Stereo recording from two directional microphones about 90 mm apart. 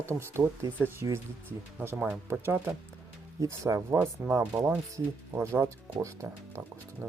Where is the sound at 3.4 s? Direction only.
40° right (ahead or behind).